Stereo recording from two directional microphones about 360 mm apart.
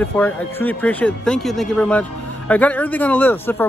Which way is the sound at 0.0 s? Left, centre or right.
Centre.